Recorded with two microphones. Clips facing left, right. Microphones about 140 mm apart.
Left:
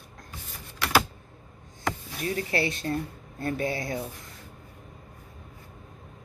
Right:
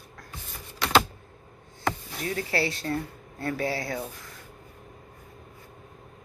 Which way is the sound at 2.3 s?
25° left (ahead or behind).